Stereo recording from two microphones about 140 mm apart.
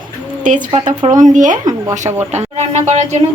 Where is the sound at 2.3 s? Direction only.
55° right (ahead or behind).